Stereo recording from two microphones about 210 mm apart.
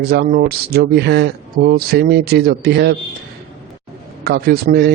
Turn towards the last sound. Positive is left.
turn(degrees=-50)  # may be behind; listen again after turning